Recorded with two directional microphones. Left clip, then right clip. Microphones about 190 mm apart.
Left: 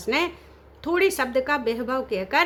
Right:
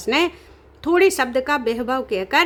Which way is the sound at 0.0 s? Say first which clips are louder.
Right 5 dB; 30° right (ahead or behind).